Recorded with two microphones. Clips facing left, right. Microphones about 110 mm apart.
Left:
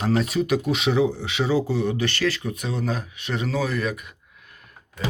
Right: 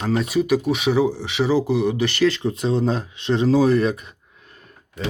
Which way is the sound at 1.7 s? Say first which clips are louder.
Right 4 dB; 15° right (ahead or behind).